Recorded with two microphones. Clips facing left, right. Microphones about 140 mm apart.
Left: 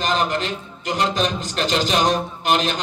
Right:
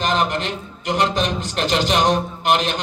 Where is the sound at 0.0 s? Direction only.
60° right (ahead or behind).